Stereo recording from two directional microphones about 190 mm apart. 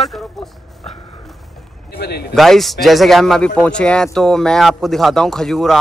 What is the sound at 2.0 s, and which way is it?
Speech, 55° left (ahead or behind).